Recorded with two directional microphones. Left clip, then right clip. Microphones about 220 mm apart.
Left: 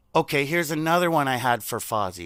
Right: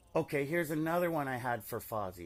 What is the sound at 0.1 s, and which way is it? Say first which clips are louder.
A man's voice: left 11 dB; 35° left (ahead or behind).